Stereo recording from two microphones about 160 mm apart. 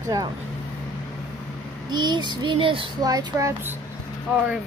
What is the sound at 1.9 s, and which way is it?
Speech, 25° right (ahead or behind).